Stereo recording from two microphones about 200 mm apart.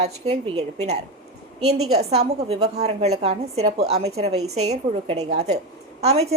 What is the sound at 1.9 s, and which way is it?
A woman's voice, 30° right (ahead or behind).